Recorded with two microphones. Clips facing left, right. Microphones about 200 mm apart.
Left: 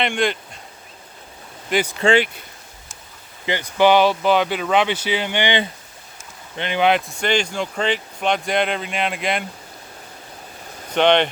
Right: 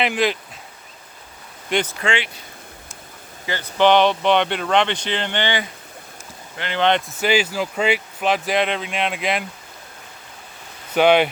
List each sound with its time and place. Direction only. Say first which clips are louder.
0.0 s speech: right 1 dB; centre (ahead or behind)
1.7 s speech: left 1 dB; 10° left (ahead or behind)
2.0 s speech: left 7 dB; 35° left (ahead or behind)
3.4 s speech: left 1 dB; 15° left (ahead or behind)
6.6 s speech: left 1 dB; 15° left (ahead or behind)
7.1 s speech: right 1 dB; 5° right (ahead or behind)
10.9 s speech: right 1 dB; 5° right (ahead or behind)